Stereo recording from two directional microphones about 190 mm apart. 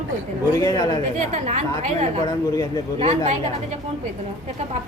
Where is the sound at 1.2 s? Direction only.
40° right (ahead or behind).